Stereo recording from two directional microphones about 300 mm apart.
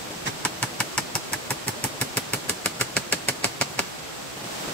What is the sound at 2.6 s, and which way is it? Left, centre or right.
Engine, centre.